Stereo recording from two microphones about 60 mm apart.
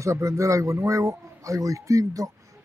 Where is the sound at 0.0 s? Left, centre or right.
Right.